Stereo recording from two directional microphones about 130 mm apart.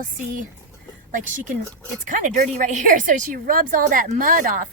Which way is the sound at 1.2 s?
85° right.